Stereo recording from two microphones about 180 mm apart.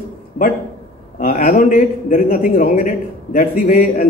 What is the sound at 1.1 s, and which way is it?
A man's voice, 50° left (ahead or behind).